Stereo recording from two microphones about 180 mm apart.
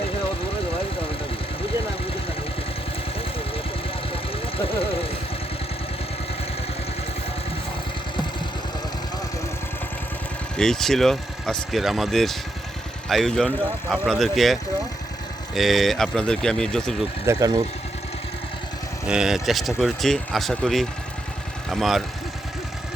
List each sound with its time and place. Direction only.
4.1 s vehicle: 30° left (ahead or behind)
10.6 s speech: 5° left (ahead or behind)
17.2 s speech: 20° right (ahead or behind)
19.0 s speech: 5° right (ahead or behind)